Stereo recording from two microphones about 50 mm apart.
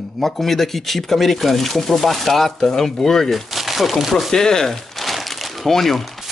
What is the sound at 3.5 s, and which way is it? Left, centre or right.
Speech, centre.